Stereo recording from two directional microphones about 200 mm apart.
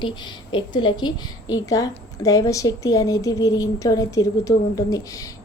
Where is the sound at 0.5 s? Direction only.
25° left (ahead or behind).